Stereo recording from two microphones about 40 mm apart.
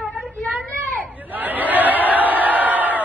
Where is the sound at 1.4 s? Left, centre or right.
Right.